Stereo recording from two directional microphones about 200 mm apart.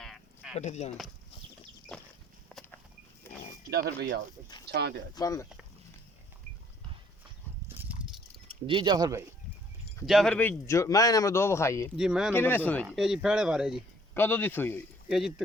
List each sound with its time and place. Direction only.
0.0 s a sound: centre (ahead or behind)
0.5 s speech: 35° left (ahead or behind)
2.5 s walk: 5° left (ahead or behind)
3.7 s speech: 50° right (ahead or behind)
5.1 s a man's voice: 15° left (ahead or behind)
7.8 s horse: 10° right (ahead or behind)
8.4 s speech: 25° right (ahead or behind)
10.1 s a man's voice: centre (ahead or behind)
11.9 s speech: 5° right (ahead or behind)
12.3 s speech: 10° left (ahead or behind)
14.1 s a man's voice: 10° left (ahead or behind)